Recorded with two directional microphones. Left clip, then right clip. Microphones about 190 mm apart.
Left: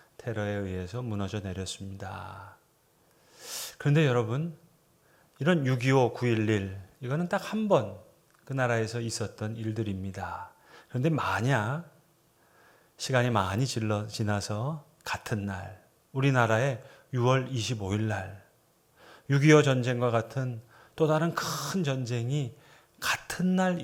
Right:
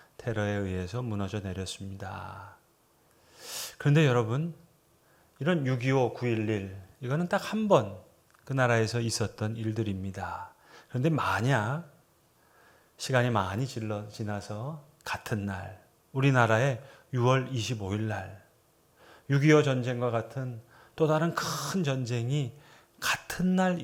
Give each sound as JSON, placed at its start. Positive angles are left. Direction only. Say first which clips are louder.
{"t": 0.2, "sound": "a man's voice", "louder": "right 1 dB", "side_deg": -5}
{"t": 3.3, "sound": "a sound", "louder": "even", "side_deg": 0}
{"t": 5.4, "sound": "speech", "louder": "left 2 dB", "side_deg": 15}
{"t": 7.0, "sound": "a man's voice", "louder": "right 1 dB", "side_deg": 0}
{"t": 15.0, "sound": "a man's voice", "louder": "even", "side_deg": 0}
{"t": 20.7, "sound": "speech", "louder": "even", "side_deg": 0}